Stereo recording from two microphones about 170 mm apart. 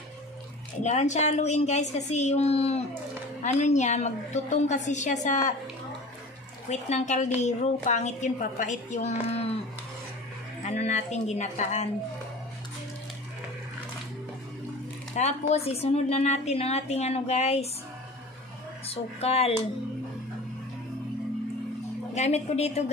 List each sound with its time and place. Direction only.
0.8 s a woman's voice: 45° left (ahead or behind)
6.7 s a woman's voice: 45° left (ahead or behind)
10.6 s a woman's voice: 40° left (ahead or behind)
15.1 s a woman's voice: 40° left (ahead or behind)
18.9 s a woman's voice: 35° left (ahead or behind)
22.1 s a woman's voice: 40° left (ahead or behind)